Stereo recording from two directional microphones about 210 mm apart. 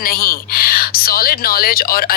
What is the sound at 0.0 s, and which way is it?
Speech, 45° left (ahead or behind).